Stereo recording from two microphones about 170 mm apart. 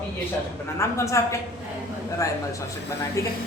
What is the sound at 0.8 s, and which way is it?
Speech, 15° left (ahead or behind).